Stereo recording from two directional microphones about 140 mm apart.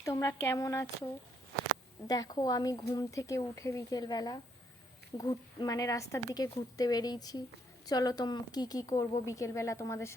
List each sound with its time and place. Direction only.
0.0 s speech: 20° left (ahead or behind)
2.0 s speech: 25° left (ahead or behind)